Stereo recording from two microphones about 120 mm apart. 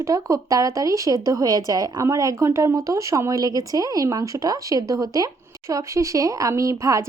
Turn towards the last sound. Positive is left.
turn(degrees=-25)  # may be behind; listen again after turning